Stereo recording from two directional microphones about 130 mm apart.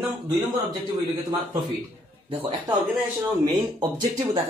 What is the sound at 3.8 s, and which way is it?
Speech, 30° right (ahead or behind).